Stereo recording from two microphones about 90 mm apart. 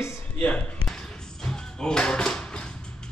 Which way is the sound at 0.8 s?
5° left (ahead or behind).